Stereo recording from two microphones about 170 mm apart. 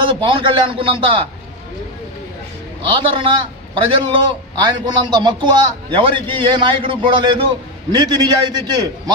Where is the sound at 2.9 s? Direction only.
30° right (ahead or behind).